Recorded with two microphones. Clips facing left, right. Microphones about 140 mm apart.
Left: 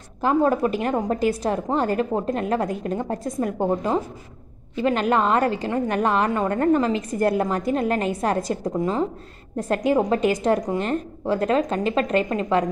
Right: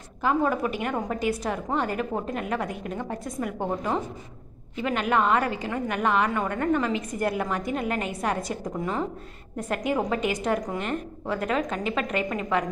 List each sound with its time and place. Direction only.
0.2 s a woman's voice: 35° left (ahead or behind)
4.8 s a woman's voice: 35° left (ahead or behind)
8.7 s a woman's voice: 20° left (ahead or behind)
9.6 s a woman's voice: 30° left (ahead or behind)